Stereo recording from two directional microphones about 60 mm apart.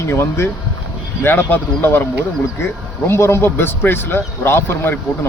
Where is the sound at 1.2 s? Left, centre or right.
Left.